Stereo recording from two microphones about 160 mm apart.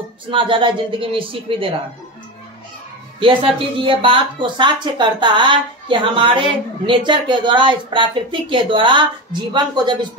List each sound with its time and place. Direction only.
0.3 s speech: 30° right (ahead or behind)
3.2 s speech: 30° right (ahead or behind)